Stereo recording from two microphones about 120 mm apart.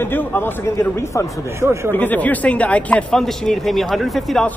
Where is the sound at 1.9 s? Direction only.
15° left (ahead or behind).